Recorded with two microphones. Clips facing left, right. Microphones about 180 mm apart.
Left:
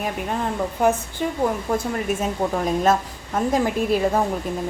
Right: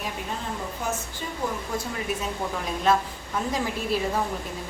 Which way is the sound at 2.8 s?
45° left (ahead or behind).